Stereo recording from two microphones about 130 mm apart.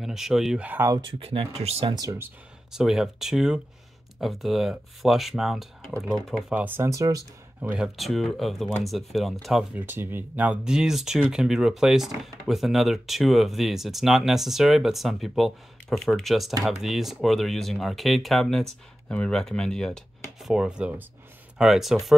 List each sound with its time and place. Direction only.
0.0 s speech: centre (ahead or behind); by 1.0 s 20° right (ahead or behind)
1.0 s speech: 45° right (ahead or behind)
2.7 s speech: 5° right (ahead or behind)
6.5 s speech: 15° right (ahead or behind)
7.6 s speech: 10° right (ahead or behind)
8.0 s speech: centre (ahead or behind)
9.8 s speech: 15° right (ahead or behind); by 20.0 s 5° left (ahead or behind)
20.4 s speech: 5° right (ahead or behind)